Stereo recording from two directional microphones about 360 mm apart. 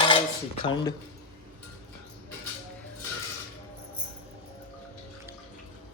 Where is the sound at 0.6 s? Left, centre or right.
Centre.